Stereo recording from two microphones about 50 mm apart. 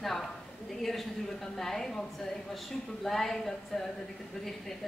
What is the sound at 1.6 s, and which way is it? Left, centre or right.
Speech, centre.